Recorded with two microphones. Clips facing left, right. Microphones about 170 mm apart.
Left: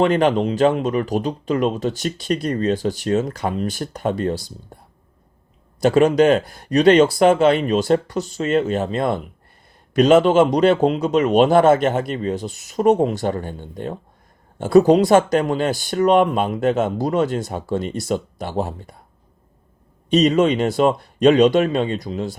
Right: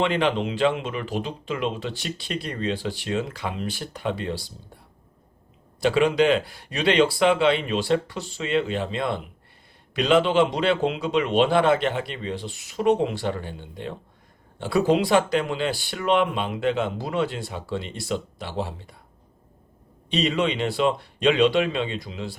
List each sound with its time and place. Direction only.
0.0 s speech: 45° left (ahead or behind)
5.8 s speech: 45° left (ahead or behind)
20.1 s speech: 45° left (ahead or behind)